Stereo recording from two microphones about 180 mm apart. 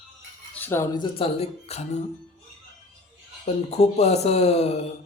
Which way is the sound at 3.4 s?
35° left (ahead or behind).